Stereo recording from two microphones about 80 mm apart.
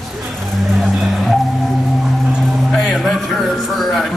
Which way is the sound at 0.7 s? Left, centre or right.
Centre.